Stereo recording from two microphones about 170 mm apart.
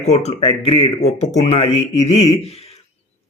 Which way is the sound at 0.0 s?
40° left (ahead or behind).